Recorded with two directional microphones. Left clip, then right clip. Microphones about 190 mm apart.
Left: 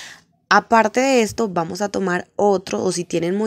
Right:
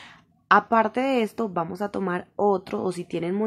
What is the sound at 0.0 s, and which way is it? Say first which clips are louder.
A woman's voice: left 8 dB; 25° left (ahead or behind).